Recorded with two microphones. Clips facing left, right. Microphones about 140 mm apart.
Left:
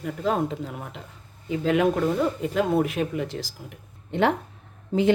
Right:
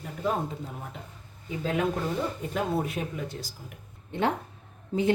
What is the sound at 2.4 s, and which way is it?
A woman's voice, 90° left.